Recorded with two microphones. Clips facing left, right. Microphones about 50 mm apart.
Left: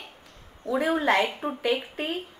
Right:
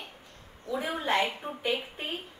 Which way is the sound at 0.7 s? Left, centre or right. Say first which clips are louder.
Left 6 dB; left.